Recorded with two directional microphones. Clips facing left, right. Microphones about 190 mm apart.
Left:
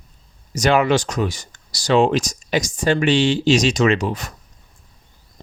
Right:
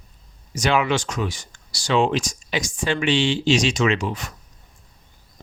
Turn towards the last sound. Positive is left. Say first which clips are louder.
# left 4 dB
turn(degrees=40)  # may be behind; listen again after turning